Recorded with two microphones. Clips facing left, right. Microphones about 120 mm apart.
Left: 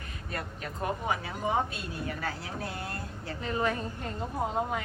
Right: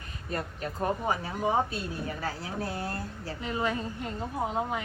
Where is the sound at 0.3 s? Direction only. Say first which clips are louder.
Right 4 dB; 35° right (ahead or behind).